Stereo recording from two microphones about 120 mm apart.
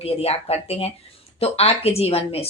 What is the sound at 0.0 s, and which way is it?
Speech, 55° left (ahead or behind).